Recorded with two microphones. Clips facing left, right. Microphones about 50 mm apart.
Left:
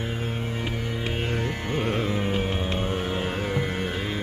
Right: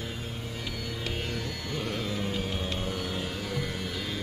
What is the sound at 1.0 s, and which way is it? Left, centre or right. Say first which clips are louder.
Music: left 6 dB; left.